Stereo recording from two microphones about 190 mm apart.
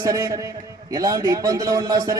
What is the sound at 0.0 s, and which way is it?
A man's voice, 20° right (ahead or behind).